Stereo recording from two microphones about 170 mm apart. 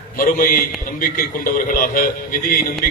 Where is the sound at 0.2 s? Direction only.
55° left (ahead or behind).